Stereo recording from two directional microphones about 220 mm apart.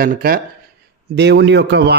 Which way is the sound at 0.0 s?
40° right (ahead or behind).